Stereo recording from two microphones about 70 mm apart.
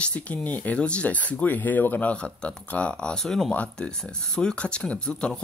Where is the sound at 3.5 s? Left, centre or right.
Centre.